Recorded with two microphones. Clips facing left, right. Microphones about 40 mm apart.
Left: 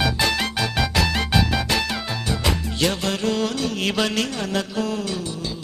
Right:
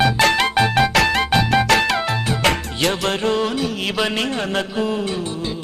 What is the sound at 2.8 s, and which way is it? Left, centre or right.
Music, right.